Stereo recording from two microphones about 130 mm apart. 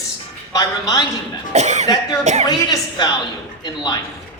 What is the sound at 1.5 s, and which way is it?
Speech, 60° right (ahead or behind).